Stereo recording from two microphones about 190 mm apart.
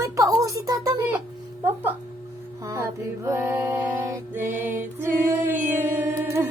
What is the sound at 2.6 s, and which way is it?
Mantra, 15° right (ahead or behind).